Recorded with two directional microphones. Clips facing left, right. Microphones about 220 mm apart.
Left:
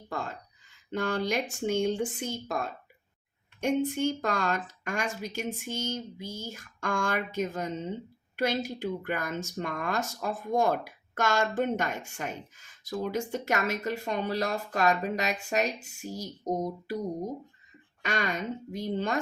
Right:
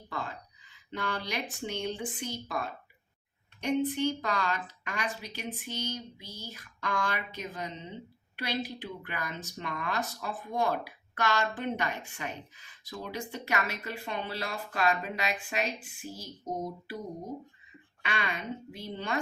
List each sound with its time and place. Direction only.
0.1 s a sound: 45° left (ahead or behind)
0.9 s a woman's voice: 45° left (ahead or behind)
18.0 s a woman's voice: 45° left (ahead or behind)